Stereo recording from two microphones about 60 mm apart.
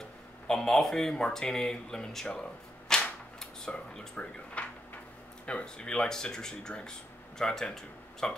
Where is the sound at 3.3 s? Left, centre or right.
Centre.